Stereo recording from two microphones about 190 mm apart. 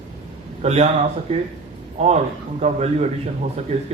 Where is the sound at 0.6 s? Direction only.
35° right (ahead or behind).